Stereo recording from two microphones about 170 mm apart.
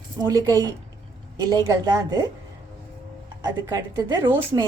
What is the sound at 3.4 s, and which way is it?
Speech, 25° right (ahead or behind).